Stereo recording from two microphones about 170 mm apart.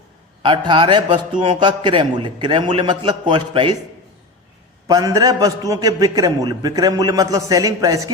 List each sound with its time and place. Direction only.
0.4 s a man's voice: 30° right (ahead or behind)
4.9 s a man's voice: 20° right (ahead or behind)